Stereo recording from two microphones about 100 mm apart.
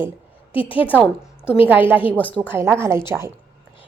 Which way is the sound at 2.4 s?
20° right (ahead or behind).